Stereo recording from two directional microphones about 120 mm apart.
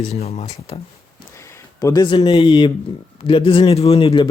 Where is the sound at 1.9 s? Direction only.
35° left (ahead or behind).